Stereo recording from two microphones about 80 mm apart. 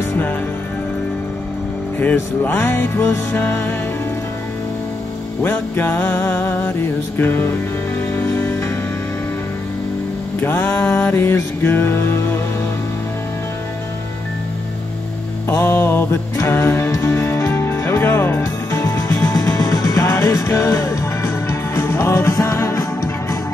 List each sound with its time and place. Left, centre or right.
2.4 s music: left
5.4 s music: left
10.4 s music: left
15.6 s music: left
18.8 s music: left